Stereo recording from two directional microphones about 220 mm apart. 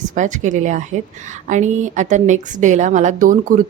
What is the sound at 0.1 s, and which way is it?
Speech, 35° right (ahead or behind).